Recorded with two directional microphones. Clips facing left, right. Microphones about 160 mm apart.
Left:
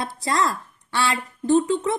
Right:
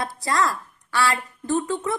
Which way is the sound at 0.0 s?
25° left (ahead or behind).